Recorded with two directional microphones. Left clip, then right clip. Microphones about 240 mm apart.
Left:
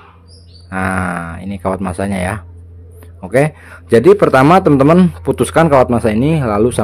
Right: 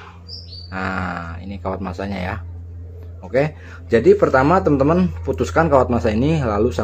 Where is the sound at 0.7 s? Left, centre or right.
Left.